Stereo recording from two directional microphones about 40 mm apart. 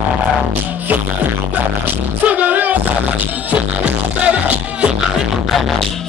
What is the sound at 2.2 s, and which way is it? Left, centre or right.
Music, right.